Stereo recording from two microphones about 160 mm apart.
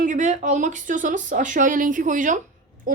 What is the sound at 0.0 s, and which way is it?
Speech, 50° right (ahead or behind).